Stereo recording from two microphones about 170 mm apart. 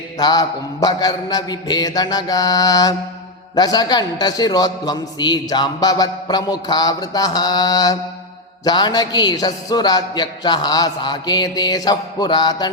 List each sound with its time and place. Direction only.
0.2 s a man's voice: 25° left (ahead or behind)